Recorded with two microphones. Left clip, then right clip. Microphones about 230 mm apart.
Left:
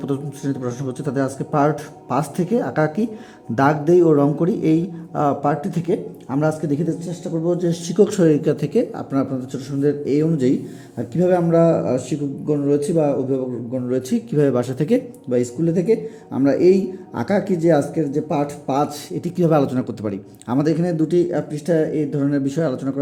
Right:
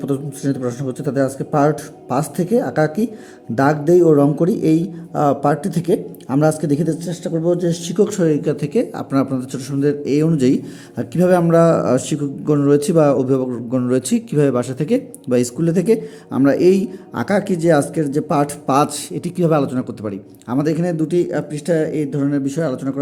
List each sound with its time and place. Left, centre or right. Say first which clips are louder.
0.0 s a man's voice: right 3 dB; centre
15.3 s a man's voice: right 3 dB; centre